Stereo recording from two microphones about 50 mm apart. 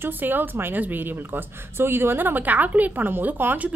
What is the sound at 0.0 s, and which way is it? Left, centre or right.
A woman's voice, right.